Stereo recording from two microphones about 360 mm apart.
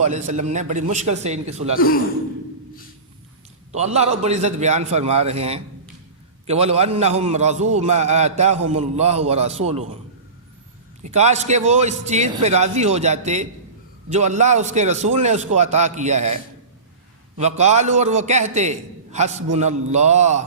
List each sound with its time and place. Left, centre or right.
0.0 s a man's voice: centre
3.7 s a man's voice: centre
11.0 s a man's voice: centre